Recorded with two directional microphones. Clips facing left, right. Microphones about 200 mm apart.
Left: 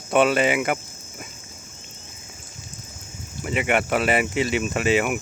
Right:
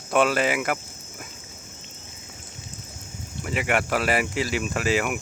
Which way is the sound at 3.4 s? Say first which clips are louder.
Left 2 dB; centre (ahead or behind).